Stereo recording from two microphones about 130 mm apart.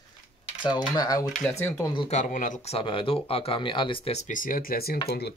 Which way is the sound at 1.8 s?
40° left (ahead or behind).